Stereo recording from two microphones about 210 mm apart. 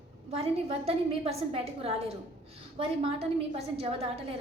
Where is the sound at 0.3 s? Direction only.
30° right (ahead or behind).